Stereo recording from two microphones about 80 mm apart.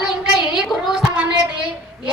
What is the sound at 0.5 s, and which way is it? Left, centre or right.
Speech, centre.